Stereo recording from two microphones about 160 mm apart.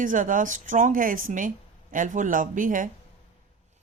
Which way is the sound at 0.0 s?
55° right (ahead or behind).